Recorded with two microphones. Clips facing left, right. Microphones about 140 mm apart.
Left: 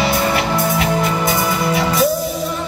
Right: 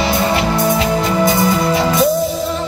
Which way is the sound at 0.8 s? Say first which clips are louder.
Right 3 dB; 25° right (ahead or behind).